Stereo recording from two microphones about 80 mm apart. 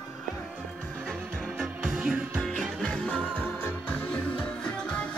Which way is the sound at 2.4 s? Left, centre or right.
Centre.